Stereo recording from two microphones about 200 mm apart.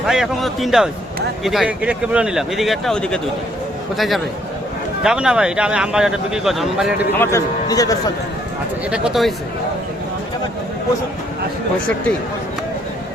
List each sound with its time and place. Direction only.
0.0 s speech: centre (ahead or behind)
7.2 s a man's voice: 15° left (ahead or behind)
8.9 s speech: centre (ahead or behind)